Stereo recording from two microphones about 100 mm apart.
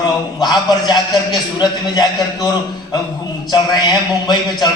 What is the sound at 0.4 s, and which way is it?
A man's voice, 45° left (ahead or behind).